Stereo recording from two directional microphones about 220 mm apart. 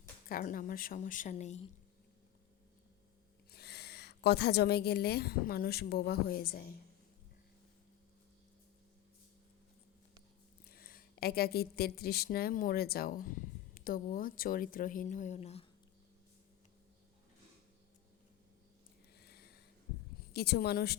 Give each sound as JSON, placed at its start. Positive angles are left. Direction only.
{"t": 0.3, "sound": "speech", "side_deg": 40}
{"t": 3.5, "sound": "a woman's voice", "side_deg": 45}
{"t": 10.7, "sound": "speech", "side_deg": 40}
{"t": 19.2, "sound": "a sound", "side_deg": 45}
{"t": 20.3, "sound": "a woman's voice", "side_deg": 45}